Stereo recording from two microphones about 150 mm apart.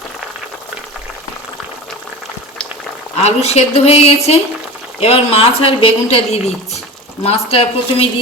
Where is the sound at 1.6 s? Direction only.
5° left (ahead or behind).